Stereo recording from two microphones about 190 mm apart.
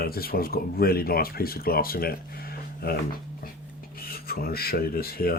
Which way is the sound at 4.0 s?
50° left (ahead or behind).